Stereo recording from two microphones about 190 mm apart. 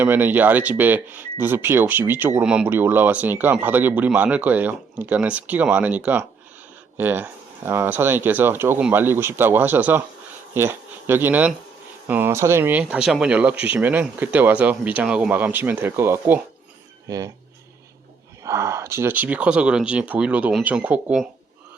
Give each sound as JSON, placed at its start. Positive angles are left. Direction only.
{"t": 0.0, "sound": "speech", "side_deg": -10}
{"t": 18.4, "sound": "speech", "side_deg": -15}